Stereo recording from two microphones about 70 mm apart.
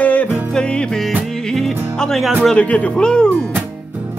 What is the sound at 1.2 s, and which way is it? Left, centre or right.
Music, centre.